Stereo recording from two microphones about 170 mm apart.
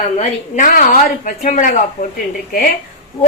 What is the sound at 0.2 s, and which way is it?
Speech, 45° left (ahead or behind).